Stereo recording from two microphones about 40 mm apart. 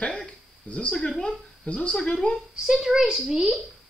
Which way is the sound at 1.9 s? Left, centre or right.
Centre.